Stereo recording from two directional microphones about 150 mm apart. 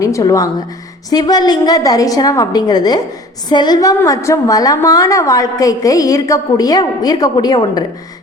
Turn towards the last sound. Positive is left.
turn(degrees=25)  # may be behind; listen again after turning